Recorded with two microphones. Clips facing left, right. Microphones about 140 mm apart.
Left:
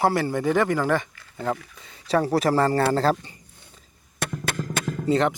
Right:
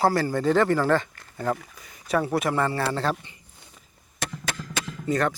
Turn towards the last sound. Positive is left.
turn(degrees=20)  # may be behind; listen again after turning